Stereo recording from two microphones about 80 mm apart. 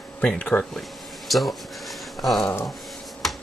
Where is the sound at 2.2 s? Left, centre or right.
Centre.